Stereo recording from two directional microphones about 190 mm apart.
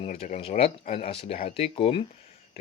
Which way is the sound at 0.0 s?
35° left (ahead or behind).